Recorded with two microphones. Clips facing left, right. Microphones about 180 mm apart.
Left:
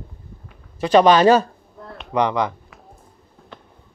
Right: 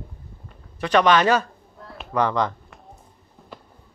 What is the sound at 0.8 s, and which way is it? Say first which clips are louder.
Speech: left 5 dB; 30° left (ahead or behind).